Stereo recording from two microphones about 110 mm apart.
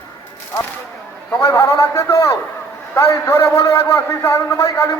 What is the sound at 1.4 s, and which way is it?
A man's voice, 25° left (ahead or behind).